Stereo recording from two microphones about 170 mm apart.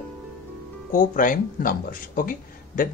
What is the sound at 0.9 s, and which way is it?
A man's voice, 50° left (ahead or behind).